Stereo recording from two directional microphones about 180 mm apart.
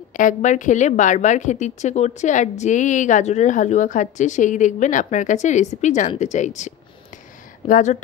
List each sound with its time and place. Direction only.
0.1 s a woman's voice: 45° left (ahead or behind)